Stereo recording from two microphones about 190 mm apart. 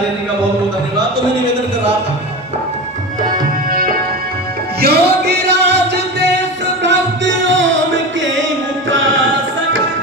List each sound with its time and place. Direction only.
3.7 s music: 50° right (ahead or behind); by 8.3 s 75° right (ahead or behind)